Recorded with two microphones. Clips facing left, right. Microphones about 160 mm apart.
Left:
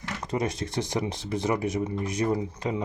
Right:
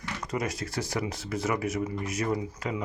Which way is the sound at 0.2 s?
25° left (ahead or behind).